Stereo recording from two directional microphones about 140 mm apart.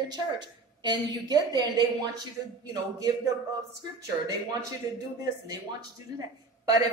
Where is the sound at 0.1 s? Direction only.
30° right (ahead or behind).